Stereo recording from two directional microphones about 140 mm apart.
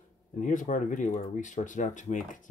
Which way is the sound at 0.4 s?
65° left (ahead or behind).